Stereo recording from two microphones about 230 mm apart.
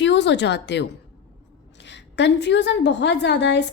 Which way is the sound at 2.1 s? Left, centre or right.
Left.